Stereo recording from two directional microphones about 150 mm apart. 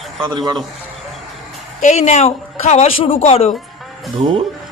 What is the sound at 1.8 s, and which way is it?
A man's voice, 50° left (ahead or behind).